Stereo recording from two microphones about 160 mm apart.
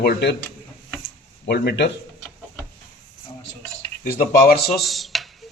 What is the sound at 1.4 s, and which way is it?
Speech, 90° left.